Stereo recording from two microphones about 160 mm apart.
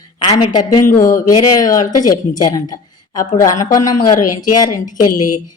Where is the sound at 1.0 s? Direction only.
20° left (ahead or behind).